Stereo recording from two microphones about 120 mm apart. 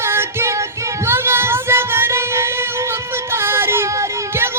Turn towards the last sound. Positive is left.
turn(degrees=-20)  # may be behind; listen again after turning